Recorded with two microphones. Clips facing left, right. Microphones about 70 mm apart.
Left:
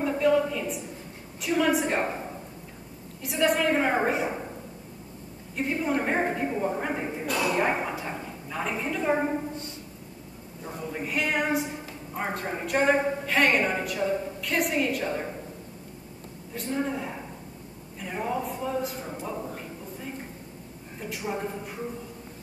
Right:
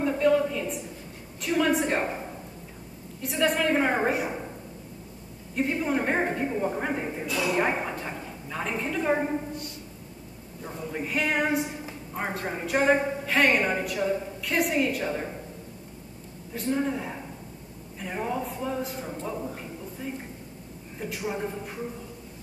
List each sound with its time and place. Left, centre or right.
0.0 s a sound: centre
1.4 s a woman's voice: centre
4.1 s a woman's voice: centre
5.6 s a woman's voice: centre
10.6 s a woman's voice: centre
16.5 s a woman's voice: centre
21.0 s a woman's voice: centre